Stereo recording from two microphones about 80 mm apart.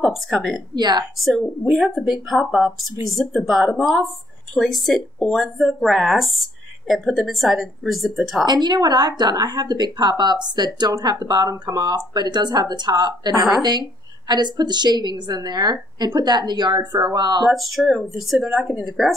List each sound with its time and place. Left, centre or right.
0.0 s speech: centre
0.7 s a woman's voice: right
1.1 s speech: centre
8.5 s a woman's voice: right
17.5 s speech: centre